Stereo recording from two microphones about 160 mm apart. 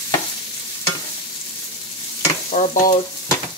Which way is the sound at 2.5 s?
45° left (ahead or behind).